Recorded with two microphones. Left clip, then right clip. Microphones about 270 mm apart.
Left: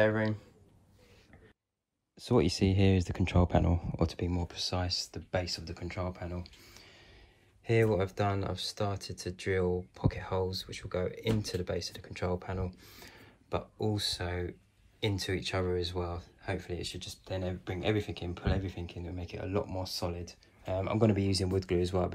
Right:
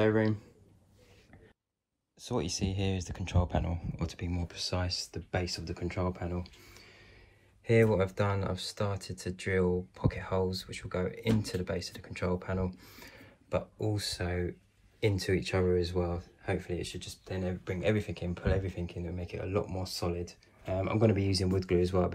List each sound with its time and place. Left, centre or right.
0.0 s speech: centre
2.6 s speech: left
3.9 s speech: centre